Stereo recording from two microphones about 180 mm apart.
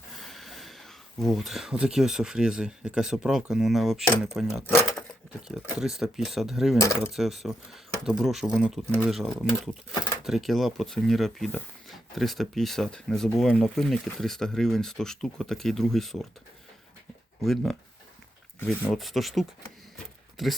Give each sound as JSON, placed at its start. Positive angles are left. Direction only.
{"t": 0.2, "sound": "speech", "side_deg": 0}
{"t": 4.7, "sound": "a sound", "side_deg": 5}
{"t": 5.6, "sound": "speech", "side_deg": 0}
{"t": 6.7, "sound": "speech", "side_deg": 15}
{"t": 7.0, "sound": "speech", "side_deg": 0}
{"t": 17.4, "sound": "speech", "side_deg": 0}
{"t": 18.9, "sound": "speech", "side_deg": 0}